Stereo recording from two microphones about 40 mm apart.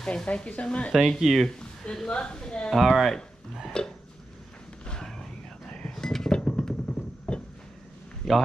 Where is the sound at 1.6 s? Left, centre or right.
Centre.